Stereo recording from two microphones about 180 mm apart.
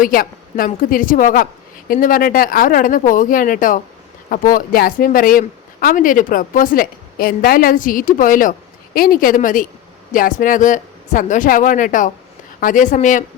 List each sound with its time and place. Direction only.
0.0 s speech: 50° left (ahead or behind)